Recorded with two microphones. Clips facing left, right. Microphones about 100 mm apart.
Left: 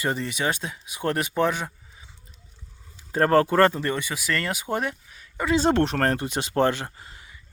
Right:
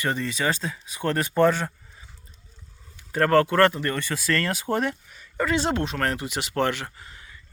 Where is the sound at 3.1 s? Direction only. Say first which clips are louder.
Even; 25° left (ahead or behind); by 5.4 s 5° left (ahead or behind).